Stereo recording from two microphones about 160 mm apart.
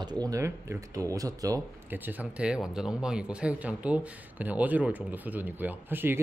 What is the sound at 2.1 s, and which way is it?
Speech, 10° right (ahead or behind).